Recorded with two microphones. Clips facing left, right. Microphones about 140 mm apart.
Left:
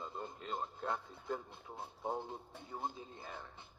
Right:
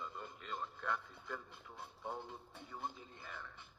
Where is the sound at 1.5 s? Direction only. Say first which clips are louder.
Left 4 dB; 20° left (ahead or behind).